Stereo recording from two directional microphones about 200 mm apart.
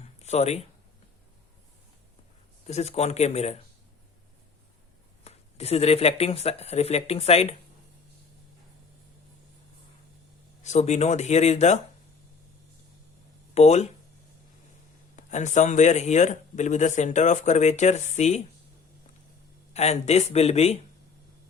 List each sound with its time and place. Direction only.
0.0 s a sound: 35° left (ahead or behind)
2.6 s speech: 30° left (ahead or behind)
5.2 s speech: 30° left (ahead or behind)
10.6 s speech: 35° left (ahead or behind)
13.5 s speech: 35° left (ahead or behind)
15.1 s speech: 35° left (ahead or behind)
19.7 s speech: 35° left (ahead or behind)